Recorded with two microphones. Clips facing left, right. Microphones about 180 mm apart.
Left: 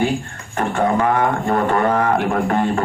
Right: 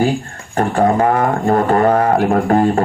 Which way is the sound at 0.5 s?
35° right (ahead or behind).